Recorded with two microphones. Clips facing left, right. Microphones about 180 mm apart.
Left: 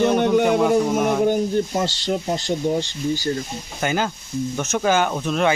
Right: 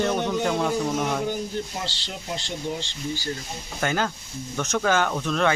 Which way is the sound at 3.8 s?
10° left (ahead or behind).